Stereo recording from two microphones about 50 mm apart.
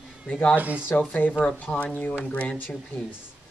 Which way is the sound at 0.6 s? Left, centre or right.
Right.